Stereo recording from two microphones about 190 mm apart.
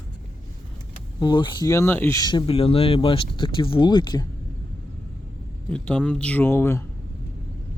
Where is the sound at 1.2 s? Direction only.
25° left (ahead or behind).